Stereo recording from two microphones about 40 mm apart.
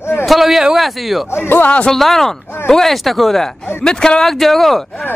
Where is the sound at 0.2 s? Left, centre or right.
Centre.